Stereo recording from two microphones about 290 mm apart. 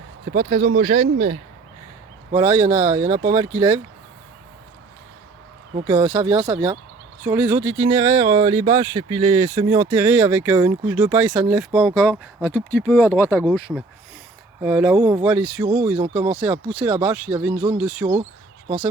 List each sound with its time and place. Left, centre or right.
0.8 s speech: right
2.3 s speech: centre
5.9 s speech: centre
16.4 s speech: centre